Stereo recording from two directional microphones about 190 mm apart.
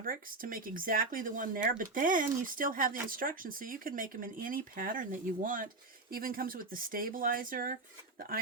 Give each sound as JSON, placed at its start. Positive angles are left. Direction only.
{"t": 0.0, "sound": "speech", "side_deg": -50}